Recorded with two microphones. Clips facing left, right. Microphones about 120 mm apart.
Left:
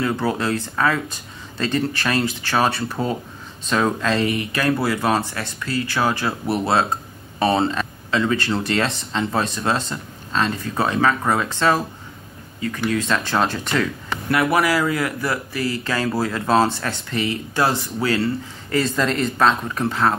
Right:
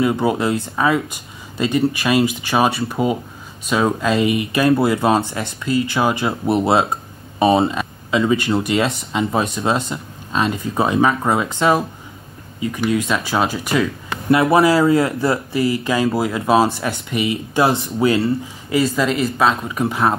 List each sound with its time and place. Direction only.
0.0 s speech: 15° right (ahead or behind)
14.3 s speech: 25° right (ahead or behind)
18.8 s speech: 5° right (ahead or behind)